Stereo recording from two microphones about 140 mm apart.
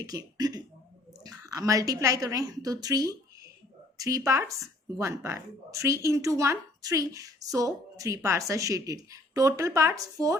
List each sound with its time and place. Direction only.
0.0 s a woman's voice: 25° right (ahead or behind)